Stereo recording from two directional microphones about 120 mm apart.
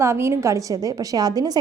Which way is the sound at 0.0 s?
20° right (ahead or behind).